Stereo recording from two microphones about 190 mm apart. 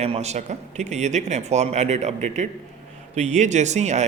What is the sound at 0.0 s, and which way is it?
Speech, 35° right (ahead or behind).